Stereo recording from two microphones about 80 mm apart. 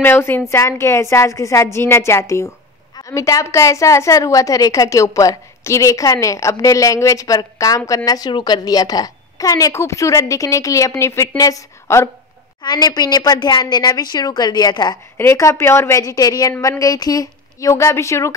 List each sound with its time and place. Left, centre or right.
0.0 s a woman's voice: left
8.3 s a woman's voice: left
8.6 s a woman's voice: left
12.6 s a woman's voice: left
15.3 s a woman's voice: left
16.0 s a woman's voice: left